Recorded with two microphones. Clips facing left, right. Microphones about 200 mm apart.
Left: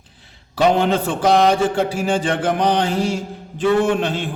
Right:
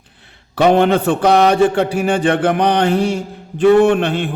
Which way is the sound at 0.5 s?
60° right (ahead or behind).